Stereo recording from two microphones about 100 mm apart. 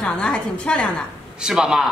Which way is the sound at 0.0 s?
10° left (ahead or behind).